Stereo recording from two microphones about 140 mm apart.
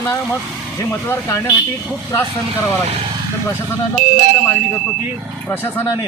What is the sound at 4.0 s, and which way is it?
Speech, 75° right (ahead or behind).